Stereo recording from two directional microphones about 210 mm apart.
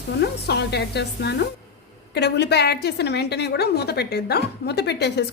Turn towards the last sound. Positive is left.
turn(degrees=55)  # may be behind; listen again after turning